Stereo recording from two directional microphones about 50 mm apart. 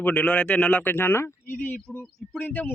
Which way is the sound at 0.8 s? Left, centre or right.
Left.